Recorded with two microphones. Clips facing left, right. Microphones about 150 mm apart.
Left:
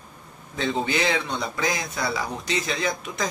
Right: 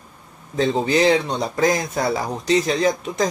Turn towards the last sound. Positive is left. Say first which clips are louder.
# right 8 dB
turn(degrees=-35)  # may be behind; listen again after turning